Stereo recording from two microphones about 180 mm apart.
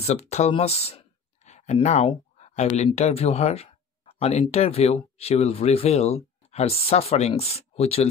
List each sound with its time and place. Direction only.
0.0 s speech: 35° left (ahead or behind)